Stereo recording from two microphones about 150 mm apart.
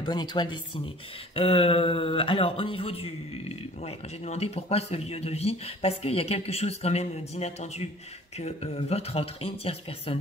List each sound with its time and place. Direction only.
0.0 s a woman's voice: 30° left (ahead or behind)